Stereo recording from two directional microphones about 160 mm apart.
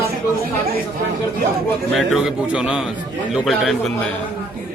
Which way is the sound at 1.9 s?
Centre (ahead or behind).